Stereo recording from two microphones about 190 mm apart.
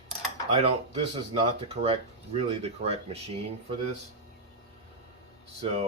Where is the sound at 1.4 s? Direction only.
30° right (ahead or behind).